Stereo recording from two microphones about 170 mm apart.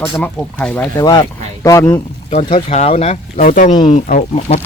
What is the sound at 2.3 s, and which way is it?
Speech, 45° left (ahead or behind).